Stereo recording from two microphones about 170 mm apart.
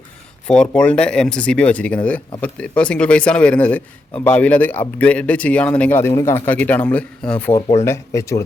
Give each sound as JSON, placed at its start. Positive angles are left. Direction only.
{"t": 0.4, "sound": "speech", "side_deg": 5}